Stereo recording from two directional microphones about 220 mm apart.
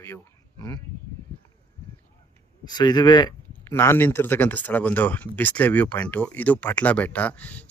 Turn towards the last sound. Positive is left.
turn(degrees=5)  # may be behind; listen again after turning